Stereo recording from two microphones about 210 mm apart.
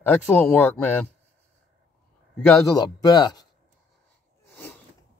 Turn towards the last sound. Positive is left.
turn(degrees=20)  # may be behind; listen again after turning